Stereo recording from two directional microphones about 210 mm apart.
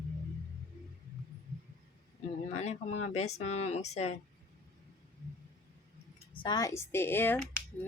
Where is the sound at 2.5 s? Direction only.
30° left (ahead or behind).